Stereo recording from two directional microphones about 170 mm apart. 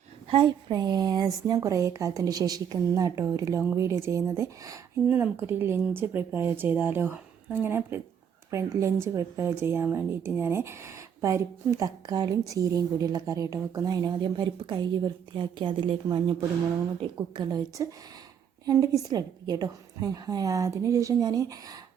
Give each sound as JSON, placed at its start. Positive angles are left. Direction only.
{"t": 0.3, "sound": "a woman's voice", "side_deg": -30}